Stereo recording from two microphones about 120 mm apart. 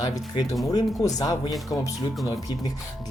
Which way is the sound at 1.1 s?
30° left (ahead or behind).